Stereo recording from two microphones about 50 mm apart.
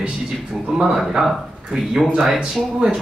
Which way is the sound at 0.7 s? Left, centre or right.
Centre.